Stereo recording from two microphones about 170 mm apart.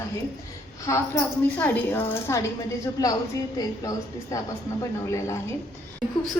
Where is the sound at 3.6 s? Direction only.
20° left (ahead or behind).